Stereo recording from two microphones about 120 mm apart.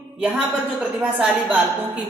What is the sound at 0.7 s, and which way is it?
Speech, 5° right (ahead or behind).